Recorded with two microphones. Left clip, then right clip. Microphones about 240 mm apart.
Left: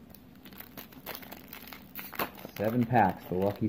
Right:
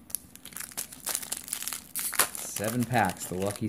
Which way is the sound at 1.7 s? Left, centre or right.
Centre.